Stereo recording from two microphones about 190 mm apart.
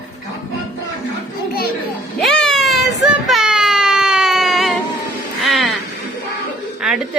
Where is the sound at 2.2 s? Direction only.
Centre (ahead or behind).